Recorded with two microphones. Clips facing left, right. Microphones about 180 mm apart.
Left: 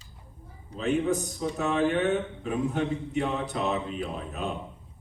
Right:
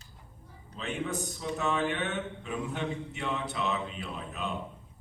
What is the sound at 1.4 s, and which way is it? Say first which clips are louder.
A man's voice: left 3 dB; 40° left (ahead or behind).